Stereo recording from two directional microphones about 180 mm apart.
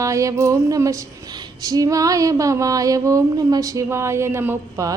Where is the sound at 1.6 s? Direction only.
20° right (ahead or behind).